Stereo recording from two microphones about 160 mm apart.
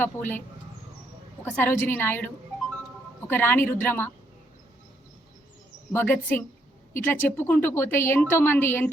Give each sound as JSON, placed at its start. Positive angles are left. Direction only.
{"t": 0.0, "sound": "a woman's voice", "side_deg": 10}
{"t": 1.5, "sound": "a woman's voice", "side_deg": 10}
{"t": 5.9, "sound": "a woman's voice", "side_deg": 10}